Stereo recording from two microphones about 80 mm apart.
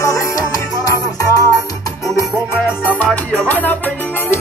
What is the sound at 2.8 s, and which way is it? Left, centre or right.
Music, centre.